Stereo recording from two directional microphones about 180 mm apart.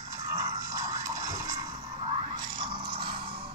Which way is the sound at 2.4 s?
25° right (ahead or behind).